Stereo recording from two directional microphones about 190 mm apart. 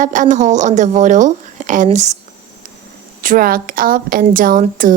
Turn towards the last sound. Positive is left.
turn(degrees=-45)  # may be behind; listen again after turning